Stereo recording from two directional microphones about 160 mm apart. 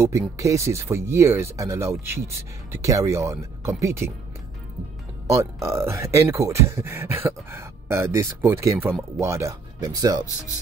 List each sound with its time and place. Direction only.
0.4 s speech: 20° right (ahead or behind)
5.3 s speech: 15° right (ahead or behind)